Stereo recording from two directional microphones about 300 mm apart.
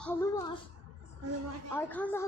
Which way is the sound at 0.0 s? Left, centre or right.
Centre.